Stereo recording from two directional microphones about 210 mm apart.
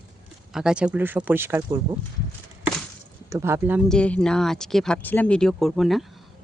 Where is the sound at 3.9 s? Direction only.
5° left (ahead or behind).